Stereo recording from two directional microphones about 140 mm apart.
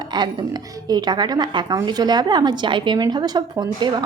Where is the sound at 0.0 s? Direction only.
30° right (ahead or behind).